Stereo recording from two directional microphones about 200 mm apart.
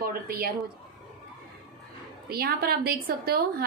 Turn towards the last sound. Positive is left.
turn(degrees=-50)  # may be behind; listen again after turning